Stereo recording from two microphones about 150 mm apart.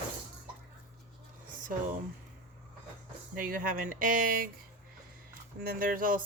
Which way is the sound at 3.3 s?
65° right (ahead or behind).